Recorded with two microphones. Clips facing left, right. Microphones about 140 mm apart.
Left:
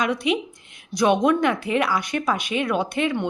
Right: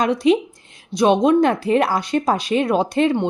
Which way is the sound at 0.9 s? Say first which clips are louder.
Right 4 dB; 25° right (ahead or behind).